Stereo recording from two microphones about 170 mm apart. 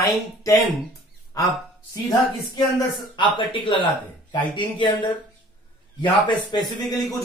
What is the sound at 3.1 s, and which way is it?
A man's voice, 30° left (ahead or behind).